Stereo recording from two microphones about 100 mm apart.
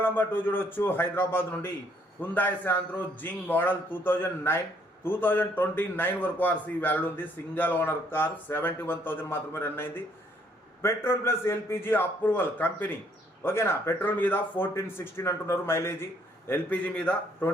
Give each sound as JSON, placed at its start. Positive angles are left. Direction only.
{"t": 0.0, "sound": "a man's voice", "side_deg": 20}
{"t": 16.5, "sound": "a man's voice", "side_deg": 15}